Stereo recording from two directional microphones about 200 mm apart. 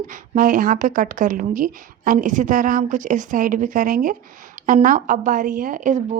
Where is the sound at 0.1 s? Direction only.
40° right (ahead or behind).